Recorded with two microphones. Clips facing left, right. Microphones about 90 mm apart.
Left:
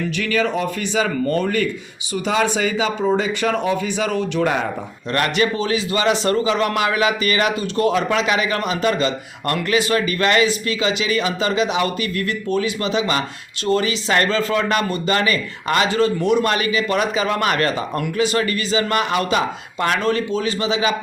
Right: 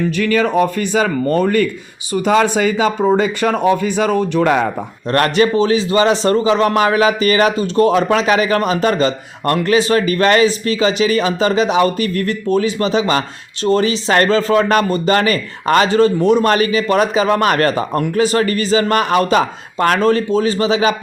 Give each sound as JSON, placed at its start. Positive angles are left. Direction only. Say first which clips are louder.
{"t": 0.2, "sound": "speech", "louder": "right 6 dB", "side_deg": -45}
{"t": 5.1, "sound": "a man's voice", "louder": "right 6 dB", "side_deg": -40}